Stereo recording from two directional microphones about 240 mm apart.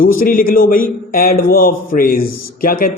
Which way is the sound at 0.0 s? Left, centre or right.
Left.